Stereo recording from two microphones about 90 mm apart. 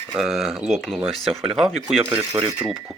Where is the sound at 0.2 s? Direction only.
5° right (ahead or behind).